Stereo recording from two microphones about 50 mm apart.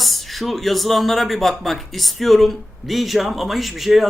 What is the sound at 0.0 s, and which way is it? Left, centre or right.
Speech, centre.